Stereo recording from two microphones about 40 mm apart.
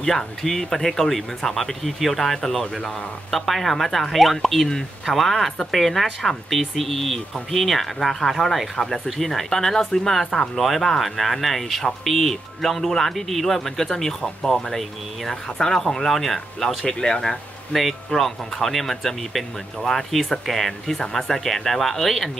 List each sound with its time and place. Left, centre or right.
0.0 s speech: centre
3.3 s speech: centre
16.8 s speech: centre
17.7 s speech: centre